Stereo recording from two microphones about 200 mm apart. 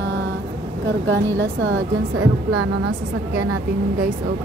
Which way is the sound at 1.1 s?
65° right (ahead or behind).